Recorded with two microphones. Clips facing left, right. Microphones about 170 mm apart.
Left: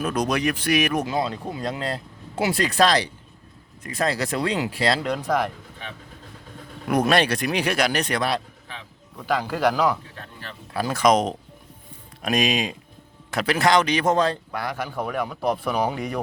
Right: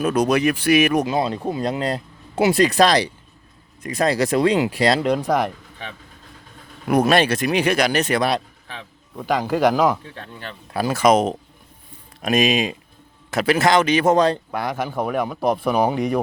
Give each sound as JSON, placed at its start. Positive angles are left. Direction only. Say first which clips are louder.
{"t": 0.0, "sound": "speech", "louder": "right 5 dB", "side_deg": -5}
{"t": 1.0, "sound": "speech", "louder": "right 4 dB", "side_deg": -20}
{"t": 6.8, "sound": "speech", "louder": "right 3 dB", "side_deg": -5}
{"t": 9.2, "sound": "speech", "louder": "right 4 dB", "side_deg": -20}
{"t": 14.9, "sound": "speech", "louder": "right 5 dB", "side_deg": -40}
{"t": 15.9, "sound": "speech", "louder": "right 7 dB", "side_deg": -20}